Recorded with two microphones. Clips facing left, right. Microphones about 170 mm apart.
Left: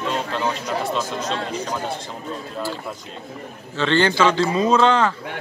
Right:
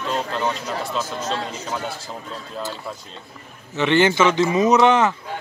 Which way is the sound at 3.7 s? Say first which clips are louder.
Right 2 dB; 15° right (ahead or behind).